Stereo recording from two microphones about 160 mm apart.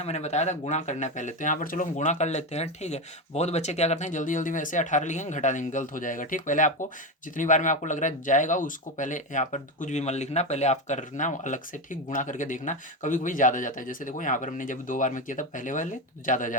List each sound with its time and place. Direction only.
0.0 s speech: 45° left (ahead or behind)